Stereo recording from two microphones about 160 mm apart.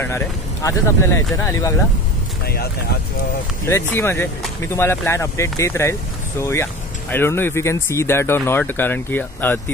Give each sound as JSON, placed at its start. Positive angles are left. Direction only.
{"t": 0.0, "sound": "speech", "side_deg": 20}
{"t": 2.4, "sound": "speech", "side_deg": 75}
{"t": 3.6, "sound": "speech", "side_deg": 15}